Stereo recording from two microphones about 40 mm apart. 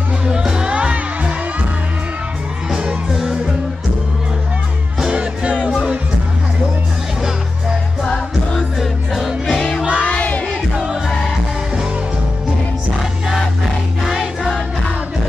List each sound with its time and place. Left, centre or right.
0.3 s music: centre
3.1 s music: centre
5.1 s music: right
8.0 s music: centre
8.7 s music: centre
9.5 s music: centre
9.9 s music: left
14.0 s music: centre